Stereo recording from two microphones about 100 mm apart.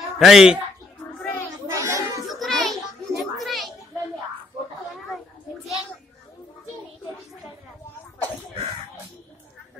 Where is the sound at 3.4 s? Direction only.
Centre (ahead or behind).